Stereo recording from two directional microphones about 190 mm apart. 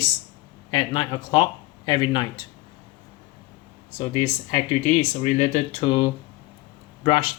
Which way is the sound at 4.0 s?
35° left (ahead or behind).